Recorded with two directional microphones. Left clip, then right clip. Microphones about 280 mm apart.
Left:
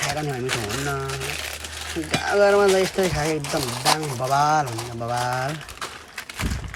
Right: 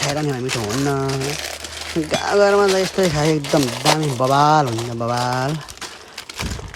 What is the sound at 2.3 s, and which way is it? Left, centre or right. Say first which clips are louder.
Mantra: right 2 dB; centre.